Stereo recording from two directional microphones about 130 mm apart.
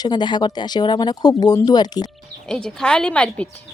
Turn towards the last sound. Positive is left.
turn(degrees=10)  # may be behind; listen again after turning